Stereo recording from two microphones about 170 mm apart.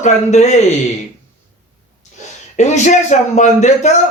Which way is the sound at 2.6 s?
45° left (ahead or behind).